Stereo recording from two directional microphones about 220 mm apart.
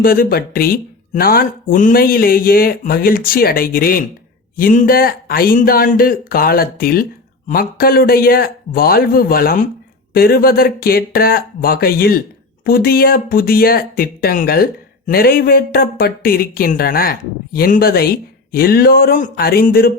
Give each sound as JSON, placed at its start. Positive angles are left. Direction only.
{"t": 0.0, "sound": "speech", "side_deg": 40}